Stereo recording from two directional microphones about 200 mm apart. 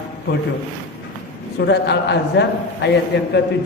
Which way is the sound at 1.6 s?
55° left (ahead or behind).